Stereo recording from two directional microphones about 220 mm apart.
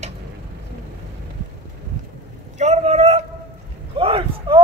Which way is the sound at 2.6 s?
30° right (ahead or behind).